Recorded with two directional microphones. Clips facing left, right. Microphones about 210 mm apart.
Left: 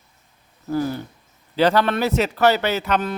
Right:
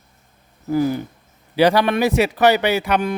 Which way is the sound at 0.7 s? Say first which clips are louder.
Right 4 dB; 10° right (ahead or behind).